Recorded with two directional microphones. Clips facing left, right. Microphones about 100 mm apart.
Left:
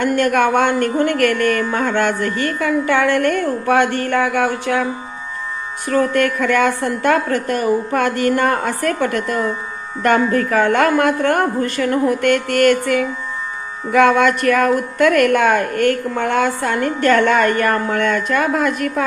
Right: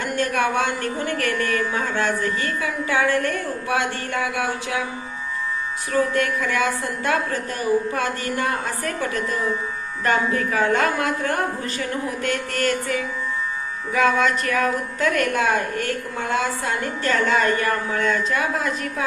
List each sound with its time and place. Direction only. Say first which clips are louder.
0.0 s a woman's voice: left 7 dB; 60° left (ahead or behind)
5.9 s a woman's voice: left 5 dB; 60° left (ahead or behind)